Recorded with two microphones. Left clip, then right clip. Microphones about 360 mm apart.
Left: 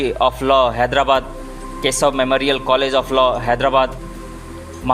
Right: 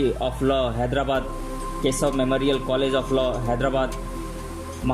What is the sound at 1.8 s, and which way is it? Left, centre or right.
A man's voice, centre.